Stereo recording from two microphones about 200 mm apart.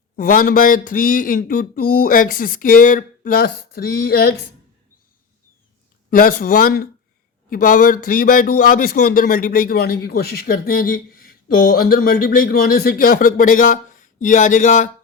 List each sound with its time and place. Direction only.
0.2 s speech: 45° left (ahead or behind)
6.1 s speech: 45° left (ahead or behind)